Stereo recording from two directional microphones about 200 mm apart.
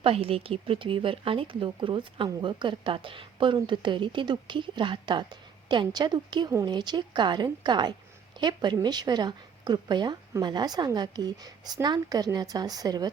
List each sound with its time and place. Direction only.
0.0 s speech: 30° right (ahead or behind)